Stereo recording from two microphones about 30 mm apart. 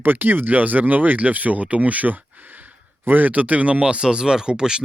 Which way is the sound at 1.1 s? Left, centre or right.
Right.